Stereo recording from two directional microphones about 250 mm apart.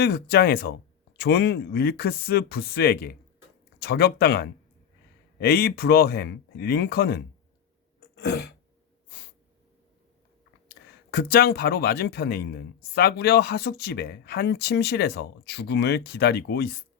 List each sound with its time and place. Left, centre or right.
0.0 s speech: left
8.1 s throat clearing: left
9.0 s snort: left
10.7 s speech: left